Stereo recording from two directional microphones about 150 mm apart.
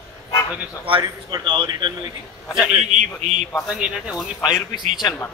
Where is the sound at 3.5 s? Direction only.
5° right (ahead or behind).